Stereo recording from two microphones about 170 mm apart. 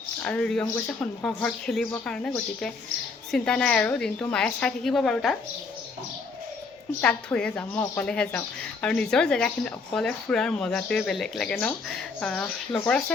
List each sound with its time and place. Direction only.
0.2 s speech: 5° left (ahead or behind)
7.0 s a woman's voice: 5° left (ahead or behind)